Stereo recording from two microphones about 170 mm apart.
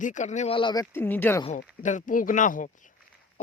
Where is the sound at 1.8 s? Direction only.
50° left (ahead or behind).